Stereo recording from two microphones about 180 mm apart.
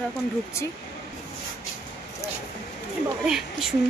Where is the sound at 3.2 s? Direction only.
5° right (ahead or behind).